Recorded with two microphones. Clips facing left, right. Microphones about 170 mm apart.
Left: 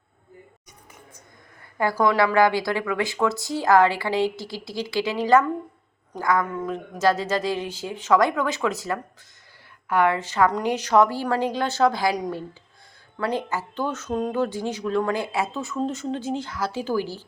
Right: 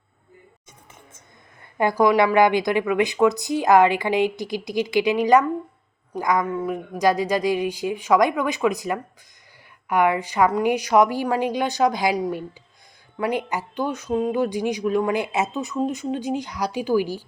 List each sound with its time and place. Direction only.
1.8 s speech: 15° right (ahead or behind)